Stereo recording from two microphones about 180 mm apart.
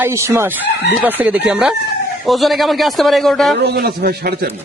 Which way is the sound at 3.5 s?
65° right (ahead or behind).